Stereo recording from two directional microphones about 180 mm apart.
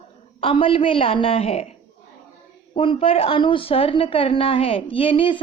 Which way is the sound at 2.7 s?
30° left (ahead or behind).